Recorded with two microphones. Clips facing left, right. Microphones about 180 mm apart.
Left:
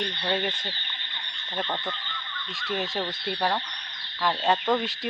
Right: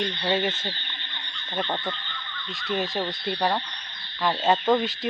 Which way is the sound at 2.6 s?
Centre (ahead or behind).